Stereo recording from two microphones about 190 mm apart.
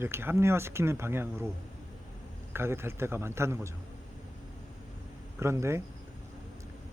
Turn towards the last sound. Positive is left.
turn(degrees=-15)  # may be behind; listen again after turning